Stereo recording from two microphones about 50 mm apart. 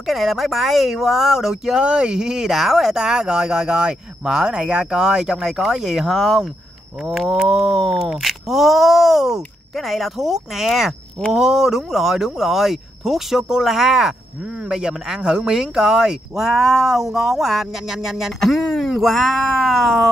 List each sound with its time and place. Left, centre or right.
0.0 s speech: centre
2.5 s speech: centre